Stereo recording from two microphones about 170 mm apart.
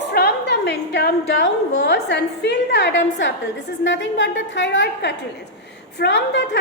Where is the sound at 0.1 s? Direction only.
75° left (ahead or behind).